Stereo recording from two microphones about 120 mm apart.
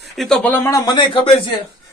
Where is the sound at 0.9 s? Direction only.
40° left (ahead or behind).